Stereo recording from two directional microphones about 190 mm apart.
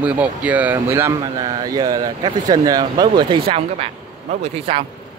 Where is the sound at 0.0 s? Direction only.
5° right (ahead or behind).